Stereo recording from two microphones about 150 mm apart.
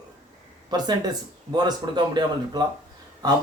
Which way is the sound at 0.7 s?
25° right (ahead or behind).